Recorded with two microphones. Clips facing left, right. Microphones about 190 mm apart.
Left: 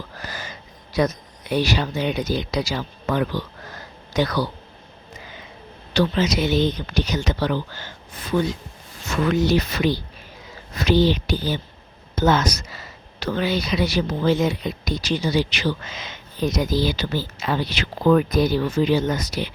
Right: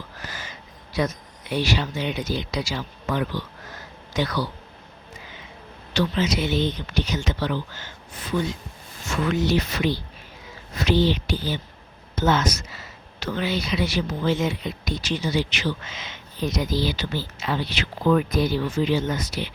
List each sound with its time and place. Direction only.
0.2 s a sound: 40° left (ahead or behind)
0.9 s speech: 40° left (ahead or behind)
5.9 s speech: 35° left (ahead or behind)
9.2 s speech: 40° left (ahead or behind)